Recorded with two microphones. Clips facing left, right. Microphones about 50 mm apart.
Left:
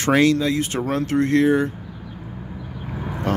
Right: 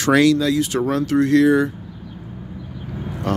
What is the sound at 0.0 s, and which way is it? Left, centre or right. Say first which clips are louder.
Speech: right 2 dB; left.